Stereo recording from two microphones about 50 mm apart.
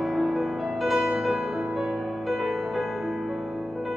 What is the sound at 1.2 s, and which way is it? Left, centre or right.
Music, centre.